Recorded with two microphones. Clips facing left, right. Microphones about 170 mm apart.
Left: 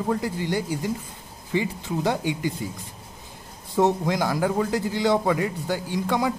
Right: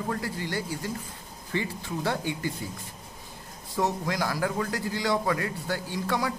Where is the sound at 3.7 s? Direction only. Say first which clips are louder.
Left 6 dB; 25° left (ahead or behind).